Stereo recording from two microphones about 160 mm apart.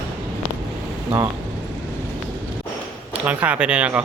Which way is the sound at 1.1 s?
25° right (ahead or behind).